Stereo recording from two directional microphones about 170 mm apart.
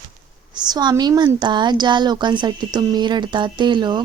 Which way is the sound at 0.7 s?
25° right (ahead or behind).